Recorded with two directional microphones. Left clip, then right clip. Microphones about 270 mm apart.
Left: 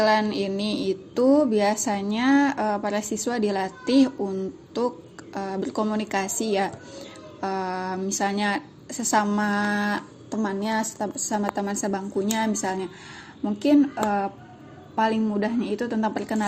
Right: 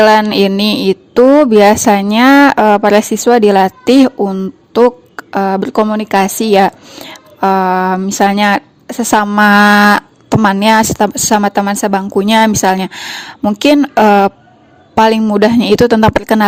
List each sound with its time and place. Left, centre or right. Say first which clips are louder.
0.0 s speech: right 14 dB; right